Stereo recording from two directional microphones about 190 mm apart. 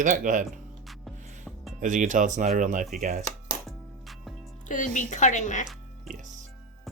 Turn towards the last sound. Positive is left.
turn(degrees=40)  # may be behind; listen again after turning